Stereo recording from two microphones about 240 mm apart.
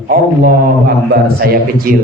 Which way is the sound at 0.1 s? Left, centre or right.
Right.